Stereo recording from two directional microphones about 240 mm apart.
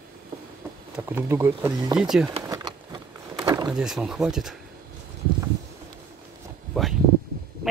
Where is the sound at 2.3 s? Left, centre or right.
Centre.